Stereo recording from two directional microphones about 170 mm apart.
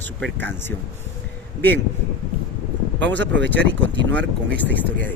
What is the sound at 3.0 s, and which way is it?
Speech, 90° right.